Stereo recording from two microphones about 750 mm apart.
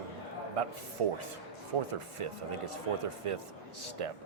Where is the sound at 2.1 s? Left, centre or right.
Right.